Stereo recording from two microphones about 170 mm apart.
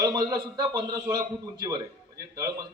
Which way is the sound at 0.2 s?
25° right (ahead or behind).